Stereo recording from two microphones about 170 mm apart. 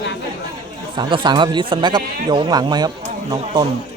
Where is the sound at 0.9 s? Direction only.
25° right (ahead or behind).